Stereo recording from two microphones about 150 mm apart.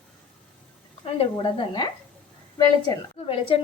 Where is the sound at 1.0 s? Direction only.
35° left (ahead or behind).